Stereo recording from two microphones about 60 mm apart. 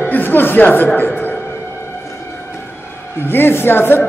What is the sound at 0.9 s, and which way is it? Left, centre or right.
Speech, left.